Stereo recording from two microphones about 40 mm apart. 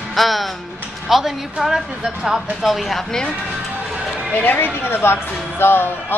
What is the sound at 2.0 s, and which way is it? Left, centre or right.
Speech, centre.